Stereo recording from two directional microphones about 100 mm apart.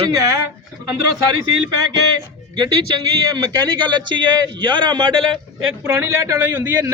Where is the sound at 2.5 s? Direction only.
45° right (ahead or behind).